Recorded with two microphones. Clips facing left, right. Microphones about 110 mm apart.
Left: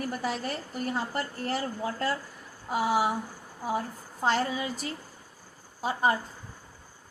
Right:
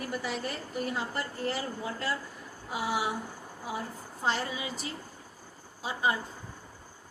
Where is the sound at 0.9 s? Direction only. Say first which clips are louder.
Left 2 dB; 40° left (ahead or behind).